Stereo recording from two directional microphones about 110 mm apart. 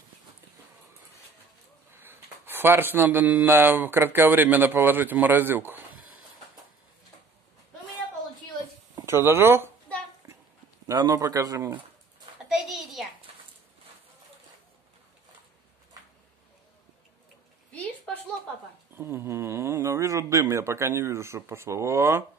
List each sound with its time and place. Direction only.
2.0 s speech: 20° right (ahead or behind)
9.0 s speech: 20° right (ahead or behind)
10.2 s dog: 25° right (ahead or behind)
10.9 s speech: 35° right (ahead or behind)
12.4 s a sound: 5° right (ahead or behind)
18.9 s a sound: 20° right (ahead or behind)